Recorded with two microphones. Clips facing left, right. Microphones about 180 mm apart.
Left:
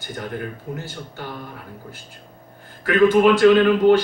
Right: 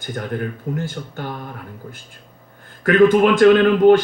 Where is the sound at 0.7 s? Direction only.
50° right (ahead or behind).